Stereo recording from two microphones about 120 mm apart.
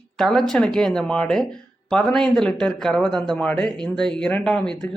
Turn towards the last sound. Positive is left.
turn(degrees=5)  # may be behind; listen again after turning